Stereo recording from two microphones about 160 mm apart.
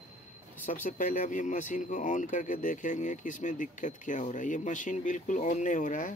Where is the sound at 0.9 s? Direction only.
55° left (ahead or behind).